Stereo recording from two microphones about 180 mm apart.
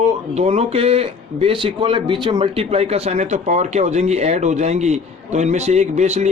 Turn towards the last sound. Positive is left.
turn(degrees=-40)  # may be behind; listen again after turning